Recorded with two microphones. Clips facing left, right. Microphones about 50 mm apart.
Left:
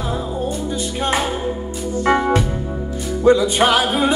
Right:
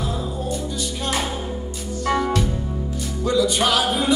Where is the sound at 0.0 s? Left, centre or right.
Left.